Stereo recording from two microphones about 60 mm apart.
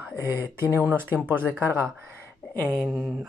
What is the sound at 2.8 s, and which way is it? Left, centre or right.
Speech, centre.